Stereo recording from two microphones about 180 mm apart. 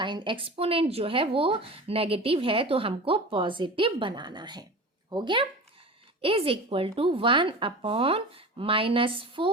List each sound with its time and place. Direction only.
0.0 s a woman's voice: 25° right (ahead or behind)